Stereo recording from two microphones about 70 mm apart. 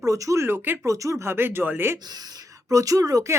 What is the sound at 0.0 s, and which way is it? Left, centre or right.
Speech, right.